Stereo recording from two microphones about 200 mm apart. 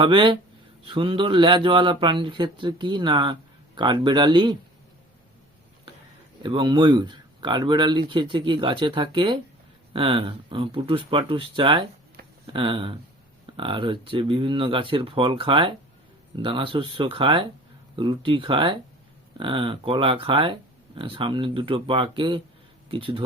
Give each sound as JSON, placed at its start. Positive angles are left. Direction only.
{"t": 0.0, "sound": "speech", "side_deg": -25}
{"t": 6.4, "sound": "speech", "side_deg": -25}